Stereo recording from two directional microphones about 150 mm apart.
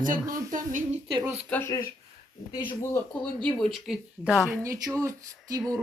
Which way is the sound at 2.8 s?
15° left (ahead or behind).